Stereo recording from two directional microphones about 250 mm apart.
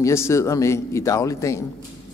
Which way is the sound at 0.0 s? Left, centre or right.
Centre.